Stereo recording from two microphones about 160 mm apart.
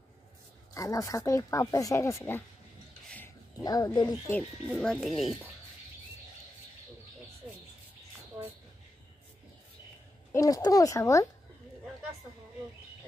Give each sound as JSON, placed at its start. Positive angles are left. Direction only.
{"t": 0.7, "sound": "speech", "side_deg": 20}
{"t": 3.5, "sound": "speech", "side_deg": 20}
{"t": 4.3, "sound": "speech", "side_deg": 5}
{"t": 10.3, "sound": "speech", "side_deg": 20}